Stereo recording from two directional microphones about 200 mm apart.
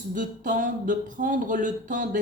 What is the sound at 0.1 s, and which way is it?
Speech, 40° right (ahead or behind).